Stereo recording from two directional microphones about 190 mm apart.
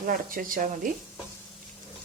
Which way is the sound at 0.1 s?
50° right (ahead or behind).